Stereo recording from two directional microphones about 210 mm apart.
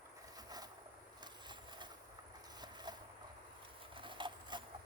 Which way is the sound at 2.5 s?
20° right (ahead or behind).